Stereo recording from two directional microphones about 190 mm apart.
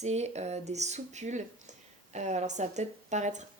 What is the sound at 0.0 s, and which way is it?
A woman's voice, 35° right (ahead or behind).